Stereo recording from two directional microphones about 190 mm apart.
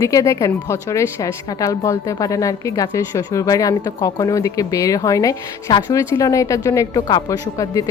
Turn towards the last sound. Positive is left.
turn(degrees=15)  # may be behind; listen again after turning